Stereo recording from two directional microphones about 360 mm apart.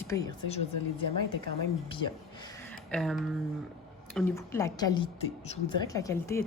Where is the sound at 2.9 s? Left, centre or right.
Centre.